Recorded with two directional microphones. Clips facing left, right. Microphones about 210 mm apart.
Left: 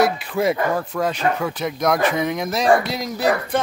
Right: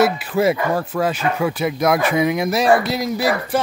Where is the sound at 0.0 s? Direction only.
5° right (ahead or behind).